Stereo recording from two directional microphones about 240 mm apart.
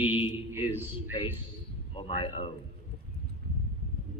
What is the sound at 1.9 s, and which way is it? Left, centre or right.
Speech, left.